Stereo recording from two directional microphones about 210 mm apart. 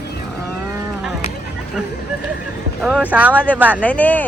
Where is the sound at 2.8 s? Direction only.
5° right (ahead or behind).